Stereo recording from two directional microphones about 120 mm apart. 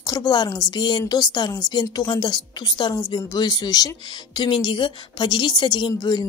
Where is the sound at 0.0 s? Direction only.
30° left (ahead or behind).